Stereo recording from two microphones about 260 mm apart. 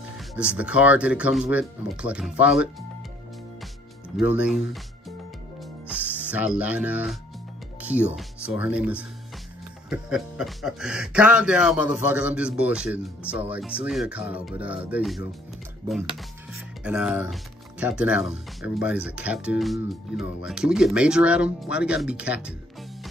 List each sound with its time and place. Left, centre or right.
0.6 s speech: centre
4.2 s speech: centre
5.6 s music: centre
7.8 s speech: centre